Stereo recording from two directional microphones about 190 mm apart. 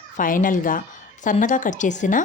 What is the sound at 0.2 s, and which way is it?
A woman's voice, 45° left (ahead or behind).